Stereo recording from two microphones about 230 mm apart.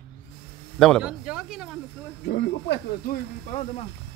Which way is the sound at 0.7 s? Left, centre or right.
Centre.